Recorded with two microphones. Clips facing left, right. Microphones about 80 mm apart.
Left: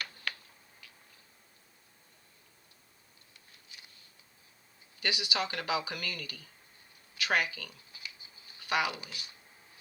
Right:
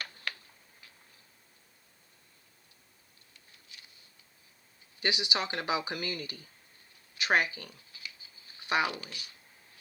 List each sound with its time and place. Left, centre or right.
4.9 s speech: right
9.0 s speech: centre